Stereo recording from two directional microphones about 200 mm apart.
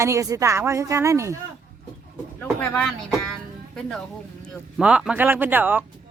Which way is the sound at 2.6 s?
5° left (ahead or behind).